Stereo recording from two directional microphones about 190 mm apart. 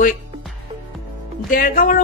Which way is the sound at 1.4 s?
50° left (ahead or behind).